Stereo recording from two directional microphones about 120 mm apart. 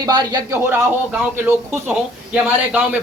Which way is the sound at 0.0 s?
35° right (ahead or behind).